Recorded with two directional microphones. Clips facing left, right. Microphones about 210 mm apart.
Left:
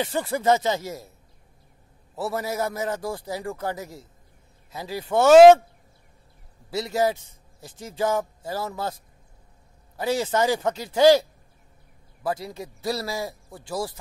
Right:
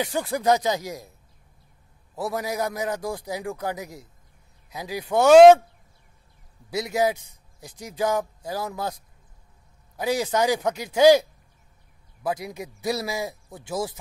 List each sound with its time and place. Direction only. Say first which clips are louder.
0.0 s speech: even; centre (ahead or behind)
2.1 s speech: even; 5° left (ahead or behind)
3.1 s speech: even; 15° right (ahead or behind)
3.4 s speech: even; centre (ahead or behind)
5.0 s speech: even; centre (ahead or behind)
6.7 s a man's voice: even; 15° right (ahead or behind)
8.0 s speech: even; centre (ahead or behind)
9.9 s a man's voice: even; 15° right (ahead or behind)
10.2 s speech: even; centre (ahead or behind)
10.7 s speech: right 1 dB; 15° right (ahead or behind)
12.3 s speech: even; 15° right (ahead or behind)